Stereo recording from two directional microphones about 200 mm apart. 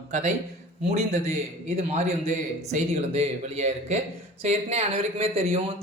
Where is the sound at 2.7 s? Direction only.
30° right (ahead or behind).